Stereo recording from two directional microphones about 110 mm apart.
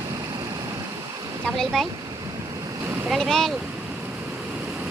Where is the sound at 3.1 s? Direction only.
5° left (ahead or behind).